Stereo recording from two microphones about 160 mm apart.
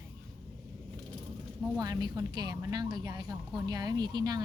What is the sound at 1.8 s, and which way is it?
A woman's voice, 25° right (ahead or behind).